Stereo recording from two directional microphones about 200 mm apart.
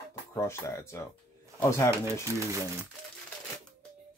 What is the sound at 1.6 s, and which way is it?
Speech, 15° left (ahead or behind).